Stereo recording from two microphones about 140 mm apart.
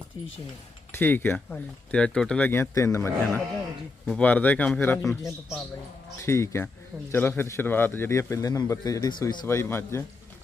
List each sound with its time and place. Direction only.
0.9 s speech: 15° left (ahead or behind)
2.5 s a man's voice: 20° left (ahead or behind)
4.0 s a man's voice: 5° left (ahead or behind); by 9.5 s 30° left (ahead or behind)
9.5 s a man's voice: 15° left (ahead or behind)